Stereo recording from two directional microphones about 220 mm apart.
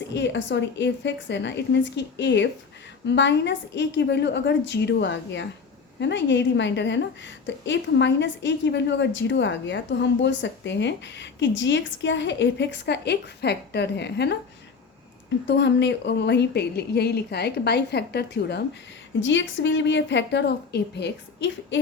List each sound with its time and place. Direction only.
0.1 s a woman's voice: 55° left (ahead or behind)
15.4 s a woman's voice: 50° left (ahead or behind)